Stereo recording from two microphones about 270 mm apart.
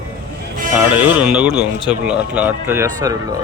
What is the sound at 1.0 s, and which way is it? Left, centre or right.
Speech, centre.